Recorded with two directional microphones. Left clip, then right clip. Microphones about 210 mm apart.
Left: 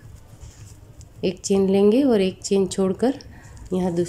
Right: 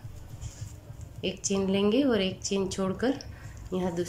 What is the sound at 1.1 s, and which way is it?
A woman's voice, 20° left (ahead or behind).